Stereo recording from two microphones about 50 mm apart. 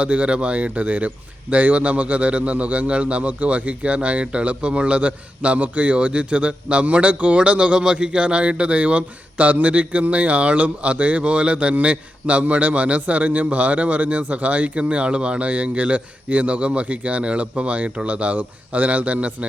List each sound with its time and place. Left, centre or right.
0.0 s a man's voice: right